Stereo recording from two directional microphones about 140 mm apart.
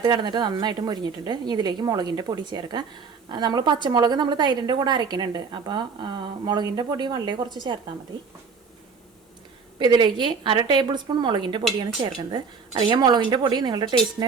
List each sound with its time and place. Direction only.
0.0 s a woman's voice: 30° right (ahead or behind)
9.7 s a woman's voice: 35° right (ahead or behind)